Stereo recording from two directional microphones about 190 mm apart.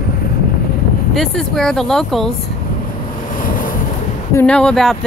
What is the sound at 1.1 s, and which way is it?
A woman's voice, centre (ahead or behind).